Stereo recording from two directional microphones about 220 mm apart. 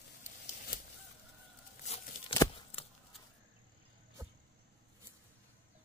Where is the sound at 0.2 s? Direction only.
35° left (ahead or behind).